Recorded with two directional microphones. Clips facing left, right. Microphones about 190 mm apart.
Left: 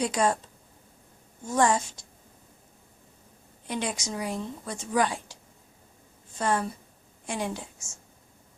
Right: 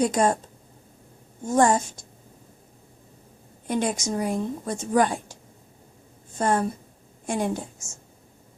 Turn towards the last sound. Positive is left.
turn(degrees=-50)  # may be behind; listen again after turning